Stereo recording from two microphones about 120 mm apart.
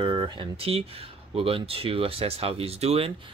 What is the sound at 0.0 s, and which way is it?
Speech, 40° right (ahead or behind).